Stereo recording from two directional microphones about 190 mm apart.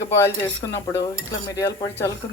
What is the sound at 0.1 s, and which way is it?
Speech, 15° left (ahead or behind).